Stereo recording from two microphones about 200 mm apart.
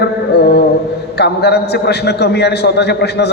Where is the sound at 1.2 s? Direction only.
55° left (ahead or behind).